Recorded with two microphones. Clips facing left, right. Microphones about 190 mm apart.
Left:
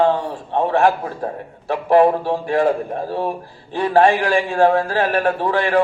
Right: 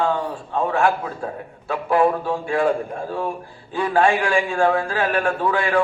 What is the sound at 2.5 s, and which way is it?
A man's voice, 35° left (ahead or behind).